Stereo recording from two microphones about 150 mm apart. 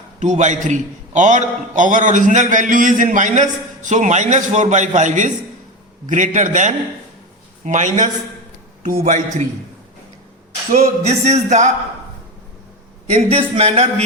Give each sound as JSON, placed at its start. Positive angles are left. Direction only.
{"t": 0.2, "sound": "a man's voice", "side_deg": -55}
{"t": 10.7, "sound": "speech", "side_deg": -45}
{"t": 13.1, "sound": "speech", "side_deg": -45}